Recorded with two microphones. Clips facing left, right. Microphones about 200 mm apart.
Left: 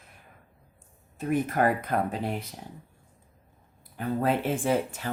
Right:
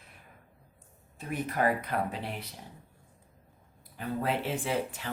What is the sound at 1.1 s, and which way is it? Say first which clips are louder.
Speech: left 6 dB; 50° left (ahead or behind).